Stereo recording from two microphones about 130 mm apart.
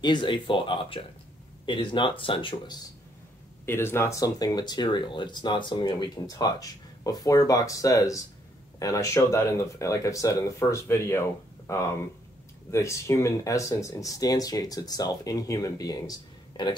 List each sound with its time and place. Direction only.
0.0 s speech: 40° left (ahead or behind)
3.6 s speech: 20° left (ahead or behind)